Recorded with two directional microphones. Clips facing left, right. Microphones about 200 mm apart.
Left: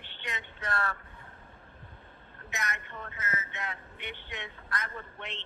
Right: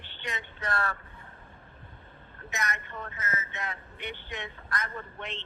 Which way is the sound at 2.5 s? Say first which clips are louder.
Right 3 dB; 40° right (ahead or behind).